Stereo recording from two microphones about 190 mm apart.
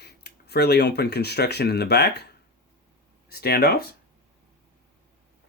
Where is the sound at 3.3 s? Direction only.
55° left (ahead or behind).